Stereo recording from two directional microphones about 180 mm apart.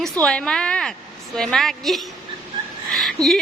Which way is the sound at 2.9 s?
Centre (ahead or behind).